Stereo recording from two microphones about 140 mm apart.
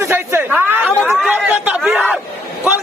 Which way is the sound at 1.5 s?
10° right (ahead or behind).